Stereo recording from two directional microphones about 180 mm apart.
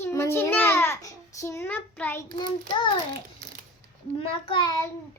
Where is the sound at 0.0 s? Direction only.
15° left (ahead or behind).